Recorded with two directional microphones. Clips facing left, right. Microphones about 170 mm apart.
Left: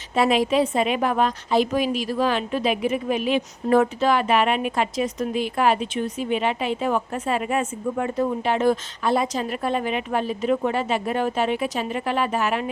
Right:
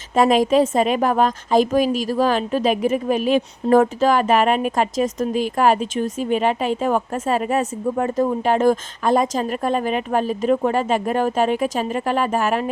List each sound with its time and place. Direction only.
0.2 s a woman's voice: 45° right (ahead or behind)